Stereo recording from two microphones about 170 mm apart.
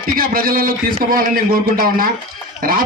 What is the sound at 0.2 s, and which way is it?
A man's voice, 60° right (ahead or behind).